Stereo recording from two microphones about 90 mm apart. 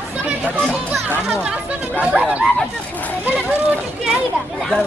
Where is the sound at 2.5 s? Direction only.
15° left (ahead or behind).